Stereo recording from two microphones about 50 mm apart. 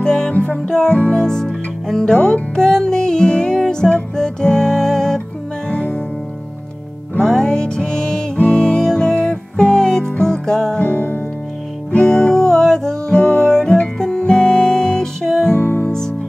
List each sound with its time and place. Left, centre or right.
0.0 s music: centre
7.2 s music: centre
10.8 s music: left
11.9 s music: centre
15.5 s music: left
15.9 s music: centre